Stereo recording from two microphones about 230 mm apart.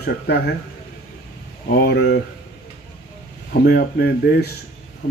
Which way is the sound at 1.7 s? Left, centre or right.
Left.